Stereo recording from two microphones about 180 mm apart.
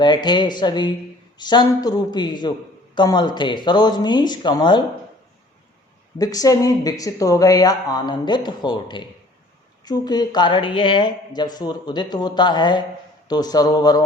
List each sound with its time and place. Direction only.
0.0 s speech: 25° left (ahead or behind)
6.1 s speech: 20° left (ahead or behind)